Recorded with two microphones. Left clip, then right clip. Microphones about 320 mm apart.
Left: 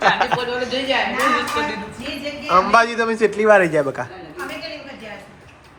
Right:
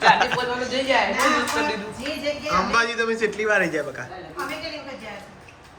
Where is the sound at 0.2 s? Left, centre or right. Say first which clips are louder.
Left 2 dB; centre.